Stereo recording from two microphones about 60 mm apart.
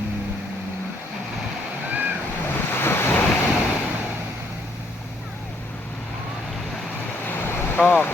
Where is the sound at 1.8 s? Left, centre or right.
Right.